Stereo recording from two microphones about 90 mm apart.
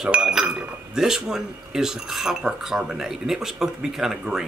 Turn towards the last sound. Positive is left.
turn(degrees=-5)  # may be behind; listen again after turning